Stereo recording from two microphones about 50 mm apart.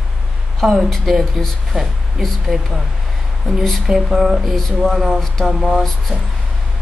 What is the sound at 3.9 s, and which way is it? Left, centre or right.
Mantra, centre.